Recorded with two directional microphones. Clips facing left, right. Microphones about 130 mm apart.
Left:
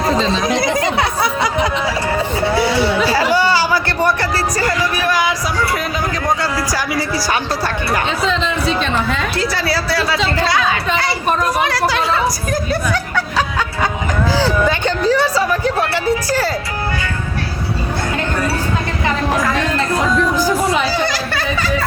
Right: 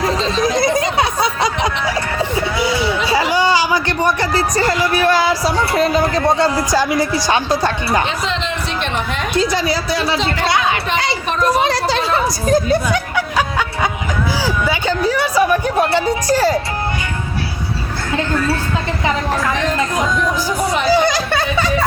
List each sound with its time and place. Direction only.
0.8 s music: 20° right (ahead or behind)
3.1 s speech: 15° right (ahead or behind)
9.3 s speech: 20° right (ahead or behind)
11.6 s chatter: 25° right (ahead or behind)
12.5 s speech: 20° right (ahead or behind)
14.3 s speech: 10° right (ahead or behind)
20.9 s a sound: 15° right (ahead or behind)